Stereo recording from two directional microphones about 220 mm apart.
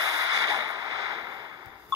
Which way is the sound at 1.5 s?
15° right (ahead or behind).